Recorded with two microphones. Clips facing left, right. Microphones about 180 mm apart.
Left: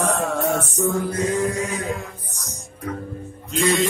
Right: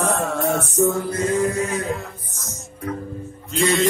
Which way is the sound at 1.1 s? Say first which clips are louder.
Right 1 dB; 40° right (ahead or behind).